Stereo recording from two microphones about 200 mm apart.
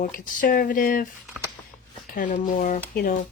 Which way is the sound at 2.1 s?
40° left (ahead or behind).